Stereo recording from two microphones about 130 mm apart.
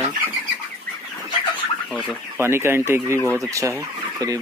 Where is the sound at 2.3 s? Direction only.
20° right (ahead or behind).